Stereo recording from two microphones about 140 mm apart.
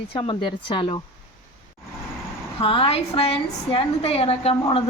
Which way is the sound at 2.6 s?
40° left (ahead or behind).